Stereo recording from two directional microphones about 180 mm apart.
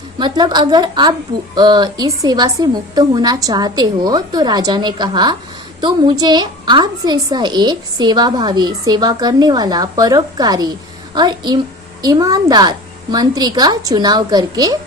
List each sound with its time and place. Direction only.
0.2 s a woman's voice: 25° right (ahead or behind)